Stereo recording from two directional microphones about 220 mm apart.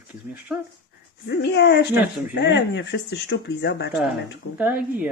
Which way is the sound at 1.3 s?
50° left (ahead or behind).